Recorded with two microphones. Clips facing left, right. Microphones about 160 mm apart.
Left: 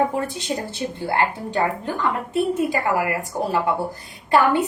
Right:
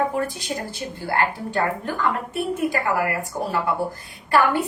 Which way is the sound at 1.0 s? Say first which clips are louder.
Left 1 dB; 20° left (ahead or behind).